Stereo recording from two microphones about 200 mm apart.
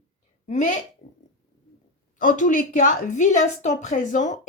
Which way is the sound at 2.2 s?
40° left (ahead or behind).